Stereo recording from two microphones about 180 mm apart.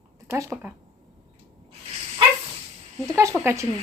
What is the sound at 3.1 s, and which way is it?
Speech, 15° right (ahead or behind).